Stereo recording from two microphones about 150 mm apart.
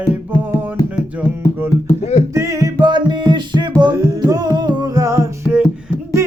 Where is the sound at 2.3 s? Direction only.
20° right (ahead or behind).